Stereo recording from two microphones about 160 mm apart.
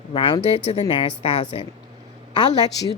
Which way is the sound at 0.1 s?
35° left (ahead or behind).